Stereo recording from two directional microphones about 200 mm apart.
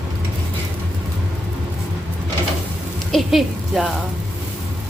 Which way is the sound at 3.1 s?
Centre (ahead or behind).